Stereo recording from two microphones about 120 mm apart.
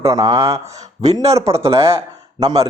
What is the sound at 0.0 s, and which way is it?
Speech, 25° right (ahead or behind).